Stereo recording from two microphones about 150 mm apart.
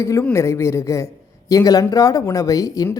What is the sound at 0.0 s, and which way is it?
A man's voice, 20° left (ahead or behind).